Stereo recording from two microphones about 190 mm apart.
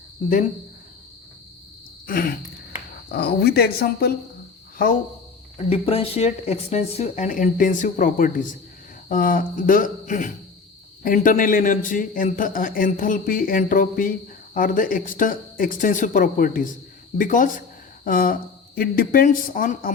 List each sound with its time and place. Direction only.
2.0 s a man's voice: 50° left (ahead or behind)
5.5 s a man's voice: 30° left (ahead or behind); by 19.9 s 45° left (ahead or behind)